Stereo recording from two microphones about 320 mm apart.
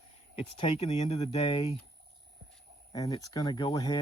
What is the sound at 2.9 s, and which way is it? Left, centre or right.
Speech, centre.